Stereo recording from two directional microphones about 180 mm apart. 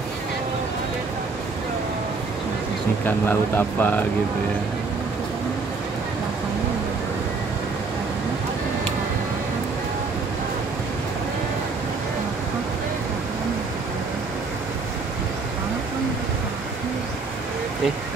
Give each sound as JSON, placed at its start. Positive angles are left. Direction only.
{"t": 3.1, "sound": "speech", "side_deg": 10}